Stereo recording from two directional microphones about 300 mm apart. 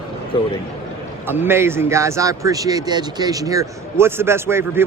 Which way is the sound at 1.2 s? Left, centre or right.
Centre.